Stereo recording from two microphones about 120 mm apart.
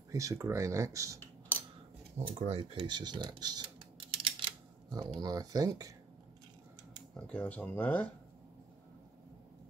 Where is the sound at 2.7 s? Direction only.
40° right (ahead or behind).